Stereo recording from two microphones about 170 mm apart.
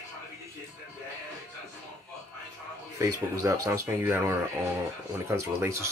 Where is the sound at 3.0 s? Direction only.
15° right (ahead or behind).